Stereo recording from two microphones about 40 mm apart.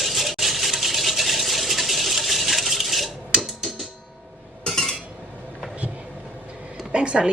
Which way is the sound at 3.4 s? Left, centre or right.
Centre.